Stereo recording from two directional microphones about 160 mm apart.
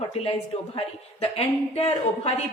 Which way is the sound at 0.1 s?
35° left (ahead or behind).